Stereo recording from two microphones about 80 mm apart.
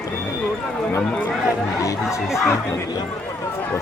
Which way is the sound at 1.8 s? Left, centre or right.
Left.